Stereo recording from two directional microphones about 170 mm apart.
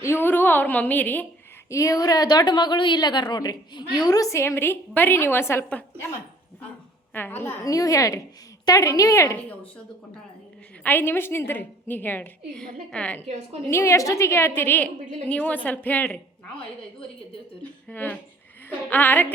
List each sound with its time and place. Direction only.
0.0 s a woman's voice: 15° left (ahead or behind)
7.1 s a woman's voice: 10° left (ahead or behind)
10.8 s a woman's voice: 10° left (ahead or behind)
17.6 s a woman's voice: 10° left (ahead or behind)